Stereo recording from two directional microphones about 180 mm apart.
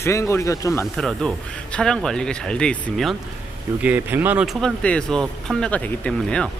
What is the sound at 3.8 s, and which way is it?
Speech, 10° right (ahead or behind).